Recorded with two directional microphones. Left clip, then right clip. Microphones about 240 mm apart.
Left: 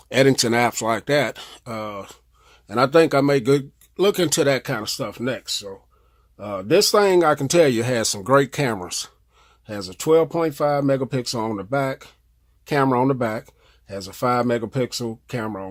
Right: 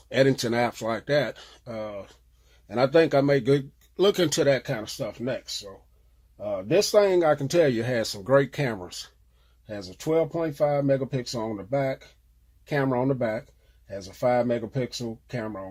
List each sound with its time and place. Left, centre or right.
0.1 s speech: left